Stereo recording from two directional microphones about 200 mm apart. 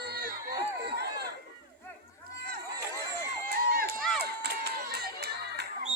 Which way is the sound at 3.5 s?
50° right (ahead or behind).